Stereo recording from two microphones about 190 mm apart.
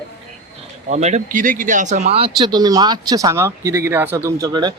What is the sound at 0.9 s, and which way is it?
Speech, 35° right (ahead or behind).